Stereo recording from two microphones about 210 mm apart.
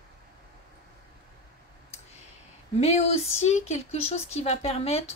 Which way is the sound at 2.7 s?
30° left (ahead or behind).